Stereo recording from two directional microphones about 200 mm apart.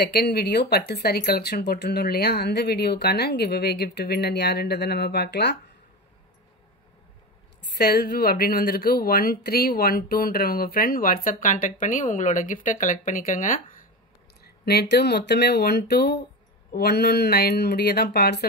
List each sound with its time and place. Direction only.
0.0 s speech: 55° left (ahead or behind)
7.6 s speech: 55° left (ahead or behind)
14.4 s speech: 55° left (ahead or behind)